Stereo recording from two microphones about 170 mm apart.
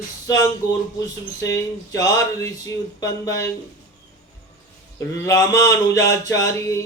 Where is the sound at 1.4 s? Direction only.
20° left (ahead or behind).